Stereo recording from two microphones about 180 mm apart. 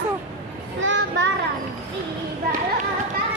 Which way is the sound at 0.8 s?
90° right.